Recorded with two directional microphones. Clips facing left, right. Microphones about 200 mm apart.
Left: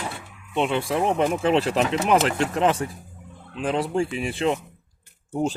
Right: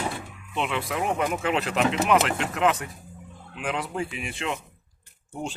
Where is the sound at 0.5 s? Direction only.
30° left (ahead or behind).